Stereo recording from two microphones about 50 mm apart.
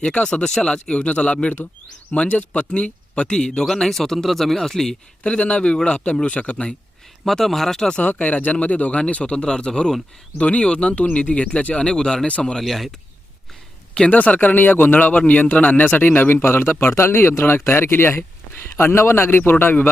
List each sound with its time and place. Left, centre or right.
0.1 s speech: left
5.2 s speech: left
7.3 s speech: centre
7.9 s speech: left
12.6 s speech: centre
14.1 s speech: left
16.4 s a man's voice: left